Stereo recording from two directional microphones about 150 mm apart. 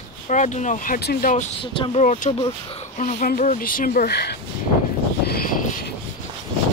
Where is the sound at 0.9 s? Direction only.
90° left.